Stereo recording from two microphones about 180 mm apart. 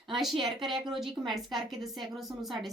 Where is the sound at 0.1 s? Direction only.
Centre (ahead or behind).